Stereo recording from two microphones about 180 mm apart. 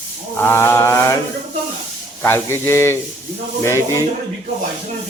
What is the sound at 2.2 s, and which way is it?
Mantra, 15° left (ahead or behind).